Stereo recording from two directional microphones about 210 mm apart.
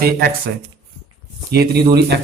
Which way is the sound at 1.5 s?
50° right (ahead or behind).